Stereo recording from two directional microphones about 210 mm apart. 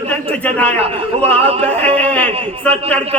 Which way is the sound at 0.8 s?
30° right (ahead or behind).